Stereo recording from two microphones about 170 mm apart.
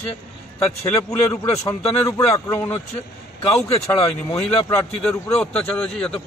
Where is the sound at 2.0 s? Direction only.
15° left (ahead or behind).